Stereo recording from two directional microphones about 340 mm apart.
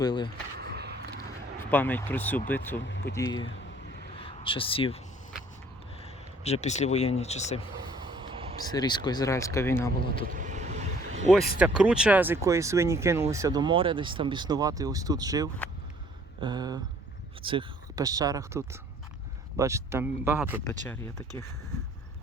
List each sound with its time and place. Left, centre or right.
0.0 s speech: centre
0.6 s skateboard: right
1.7 s speech: centre
2.8 s speech: left
3.2 s speech: centre
4.2 s a sound: centre
6.4 s speech: centre
8.0 s a sound: centre
8.7 s speech: centre
10.2 s vehicle: right
11.3 s speech: centre
20.8 s speech: centre